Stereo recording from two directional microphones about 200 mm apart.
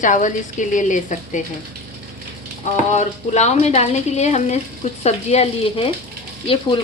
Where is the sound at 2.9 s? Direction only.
35° left (ahead or behind).